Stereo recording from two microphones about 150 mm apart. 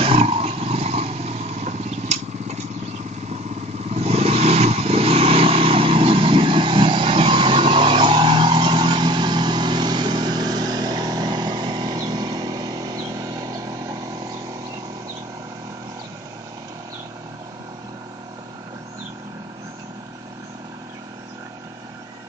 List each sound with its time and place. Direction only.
0.0 s vehicle: 40° right (ahead or behind)
3.8 s vehicle: 45° right (ahead or behind); by 14.3 s 25° right (ahead or behind)